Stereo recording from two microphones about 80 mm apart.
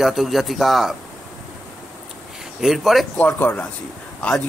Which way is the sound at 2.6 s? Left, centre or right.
Centre.